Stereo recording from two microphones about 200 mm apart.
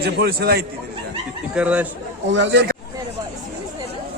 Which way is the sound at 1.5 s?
5° right (ahead or behind).